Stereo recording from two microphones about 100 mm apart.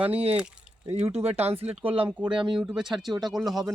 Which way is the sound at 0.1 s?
85° right.